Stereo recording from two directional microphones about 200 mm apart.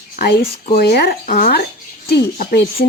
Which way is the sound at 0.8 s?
50° left (ahead or behind).